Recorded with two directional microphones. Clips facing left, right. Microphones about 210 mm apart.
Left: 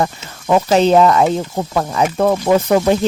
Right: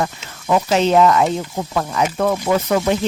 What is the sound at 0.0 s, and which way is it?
Speech, 35° left (ahead or behind).